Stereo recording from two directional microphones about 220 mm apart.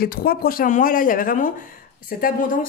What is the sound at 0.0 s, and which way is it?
Speech, 40° left (ahead or behind).